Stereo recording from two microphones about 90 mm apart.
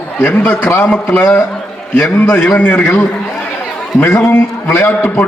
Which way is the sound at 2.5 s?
15° left (ahead or behind).